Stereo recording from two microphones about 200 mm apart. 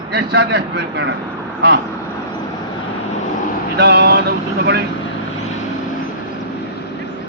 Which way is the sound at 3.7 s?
55° right (ahead or behind).